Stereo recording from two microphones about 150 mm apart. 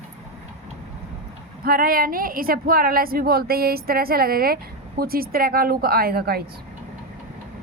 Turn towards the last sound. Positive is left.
turn(degrees=-90)